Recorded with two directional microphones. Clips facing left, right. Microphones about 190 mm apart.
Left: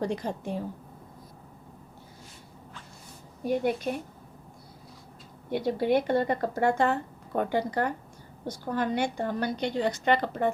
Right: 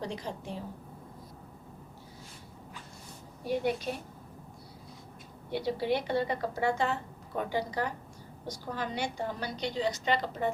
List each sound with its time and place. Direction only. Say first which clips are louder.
0.0 s speech: left 7 dB; 50° left (ahead or behind)
3.4 s speech: left 3 dB; 50° left (ahead or behind)
5.5 s a woman's voice: left 5 dB; 50° left (ahead or behind)